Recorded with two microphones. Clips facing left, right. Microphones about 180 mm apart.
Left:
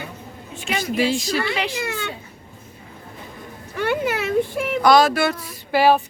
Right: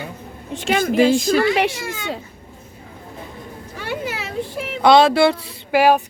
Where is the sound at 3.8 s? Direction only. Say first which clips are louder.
Left 5 dB; 55° left (ahead or behind).